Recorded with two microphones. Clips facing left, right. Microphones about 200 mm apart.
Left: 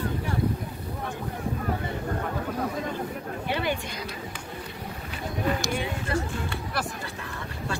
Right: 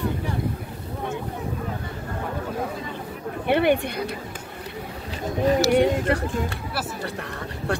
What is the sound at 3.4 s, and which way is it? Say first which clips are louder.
Speech: right 10 dB; 60° right (ahead or behind).